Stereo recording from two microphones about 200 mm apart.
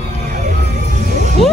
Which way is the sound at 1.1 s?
35° right (ahead or behind).